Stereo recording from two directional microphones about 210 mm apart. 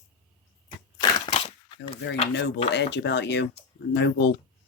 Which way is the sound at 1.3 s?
30° left (ahead or behind).